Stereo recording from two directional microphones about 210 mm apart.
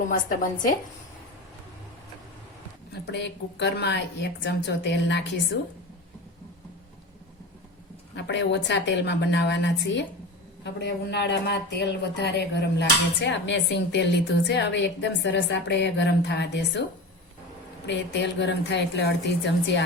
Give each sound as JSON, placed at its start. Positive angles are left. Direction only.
{"t": 0.1, "sound": "a woman's voice", "side_deg": 40}
{"t": 2.9, "sound": "speech", "side_deg": 55}
{"t": 8.1, "sound": "speech", "side_deg": 55}
{"t": 17.8, "sound": "speech", "side_deg": 55}